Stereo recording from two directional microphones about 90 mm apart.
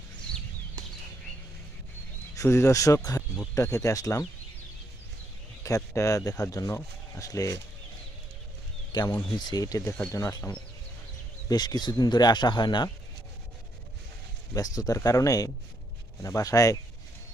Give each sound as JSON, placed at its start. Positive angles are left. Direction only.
{"t": 2.3, "sound": "speech", "side_deg": 35}
{"t": 5.6, "sound": "speech", "side_deg": 35}
{"t": 8.9, "sound": "speech", "side_deg": 50}
{"t": 14.5, "sound": "speech", "side_deg": 40}